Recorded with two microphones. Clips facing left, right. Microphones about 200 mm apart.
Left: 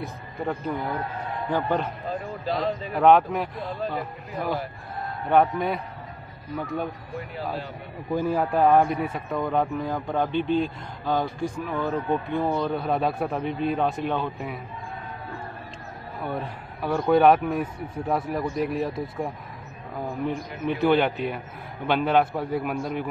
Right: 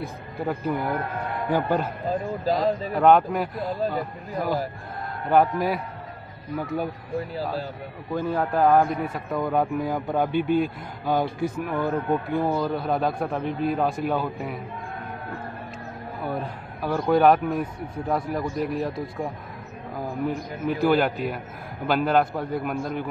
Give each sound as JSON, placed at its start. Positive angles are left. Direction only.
{"t": 0.0, "sound": "a man's voice", "side_deg": -10}
{"t": 2.4, "sound": "a man's voice", "side_deg": -40}
{"t": 2.9, "sound": "a man's voice", "side_deg": 0}
{"t": 8.1, "sound": "a man's voice", "side_deg": 10}
{"t": 16.3, "sound": "a man's voice", "side_deg": 0}
{"t": 20.2, "sound": "a man's voice", "side_deg": -5}